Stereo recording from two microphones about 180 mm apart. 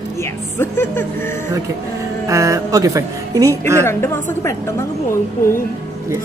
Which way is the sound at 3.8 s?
15° left (ahead or behind).